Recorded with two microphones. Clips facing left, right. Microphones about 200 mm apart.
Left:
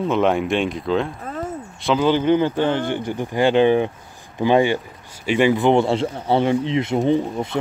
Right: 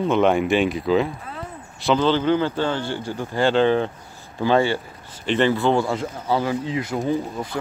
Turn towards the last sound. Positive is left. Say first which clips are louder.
# left 4 dB
turn(degrees=25)  # may be behind; listen again after turning